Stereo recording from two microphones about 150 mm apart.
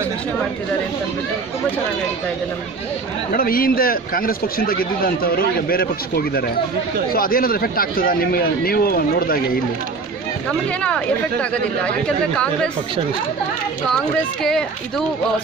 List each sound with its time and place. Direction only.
3.3 s a man's voice: 75° left (ahead or behind)
7.1 s speech: 75° left (ahead or behind)
14.4 s speech: centre (ahead or behind)